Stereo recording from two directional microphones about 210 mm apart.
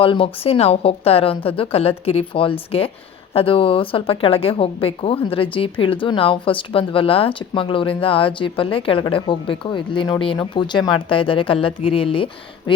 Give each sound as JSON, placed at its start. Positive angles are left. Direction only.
{"t": 0.0, "sound": "a woman's voice", "side_deg": 25}